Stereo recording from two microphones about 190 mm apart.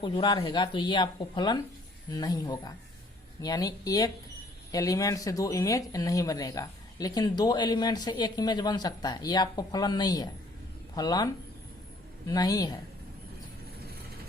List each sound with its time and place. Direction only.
0.0 s speech: 25° left (ahead or behind)
12.3 s speech: 20° left (ahead or behind)